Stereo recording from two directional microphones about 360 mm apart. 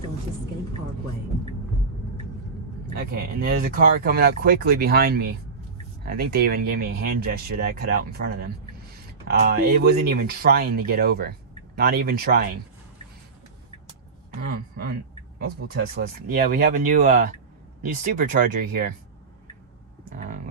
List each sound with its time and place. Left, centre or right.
3.0 s speech: right
14.5 s speech: right
20.1 s a sound: right